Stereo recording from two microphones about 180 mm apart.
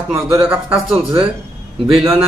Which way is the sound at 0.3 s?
5° right (ahead or behind).